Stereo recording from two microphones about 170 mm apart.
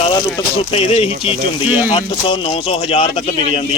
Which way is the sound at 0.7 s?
35° left (ahead or behind).